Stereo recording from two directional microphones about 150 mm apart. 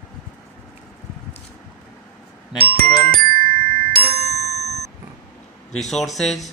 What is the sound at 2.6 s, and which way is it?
Glockenspiel, 90° right.